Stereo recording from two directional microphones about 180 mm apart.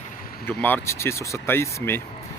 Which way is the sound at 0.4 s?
10° left (ahead or behind).